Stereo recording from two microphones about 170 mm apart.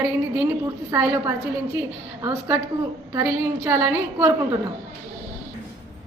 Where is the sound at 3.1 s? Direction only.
15° right (ahead or behind).